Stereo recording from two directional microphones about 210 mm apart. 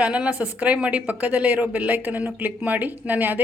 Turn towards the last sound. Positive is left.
turn(degrees=-10)  # may be behind; listen again after turning